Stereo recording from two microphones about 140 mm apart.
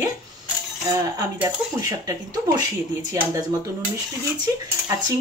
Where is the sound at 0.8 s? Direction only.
25° right (ahead or behind).